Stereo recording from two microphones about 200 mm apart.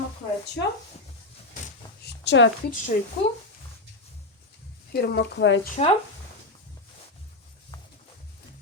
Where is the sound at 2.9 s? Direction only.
40° left (ahead or behind).